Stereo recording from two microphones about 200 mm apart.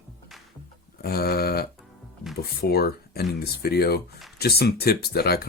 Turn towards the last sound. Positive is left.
turn(degrees=50)  # may be behind; listen again after turning